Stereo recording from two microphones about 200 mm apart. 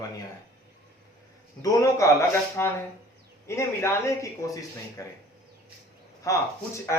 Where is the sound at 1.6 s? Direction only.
15° left (ahead or behind).